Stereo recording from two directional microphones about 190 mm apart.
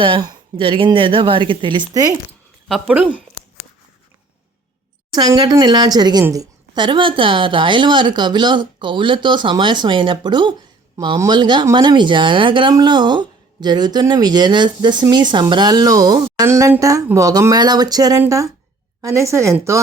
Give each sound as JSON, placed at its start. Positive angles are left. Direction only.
{"t": 0.0, "sound": "speech", "side_deg": -25}
{"t": 2.6, "sound": "speech", "side_deg": -5}
{"t": 5.1, "sound": "a woman's voice", "side_deg": -20}